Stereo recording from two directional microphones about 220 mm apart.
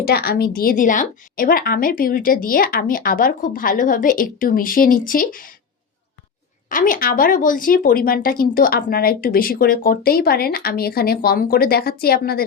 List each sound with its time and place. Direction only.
0.0 s speech: 45° left (ahead or behind)
6.7 s speech: 35° left (ahead or behind)